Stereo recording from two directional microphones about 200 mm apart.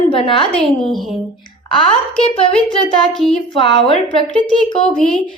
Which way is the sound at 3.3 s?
25° left (ahead or behind).